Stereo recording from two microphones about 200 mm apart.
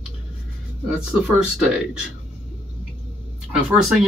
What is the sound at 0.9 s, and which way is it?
Speech, 5° right (ahead or behind).